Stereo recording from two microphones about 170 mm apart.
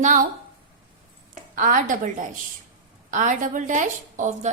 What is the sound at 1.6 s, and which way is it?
A woman's voice, 50° right (ahead or behind).